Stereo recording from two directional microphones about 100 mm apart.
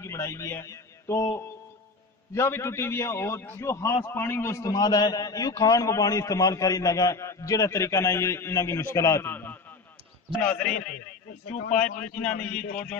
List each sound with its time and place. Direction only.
0.0 s a man's voice: 30° left (ahead or behind)
2.3 s a man's voice: 25° left (ahead or behind)
9.3 s a sound: 20° left (ahead or behind)
10.4 s a man's voice: 10° left (ahead or behind)